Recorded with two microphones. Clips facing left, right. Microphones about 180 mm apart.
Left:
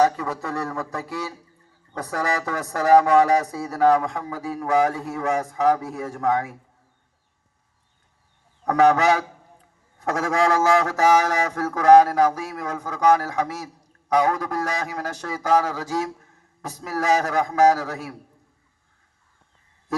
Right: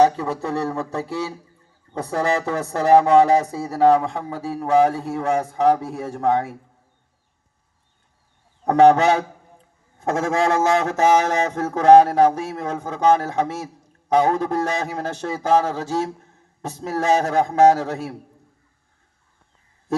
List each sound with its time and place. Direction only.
0.0 s speech: 30° right (ahead or behind)
8.6 s speech: 30° right (ahead or behind)